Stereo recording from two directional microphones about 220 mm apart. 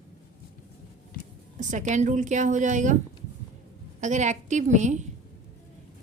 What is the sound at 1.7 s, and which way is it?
A woman's voice, 35° right (ahead or behind).